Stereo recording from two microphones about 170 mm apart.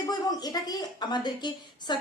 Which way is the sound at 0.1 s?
25° left (ahead or behind).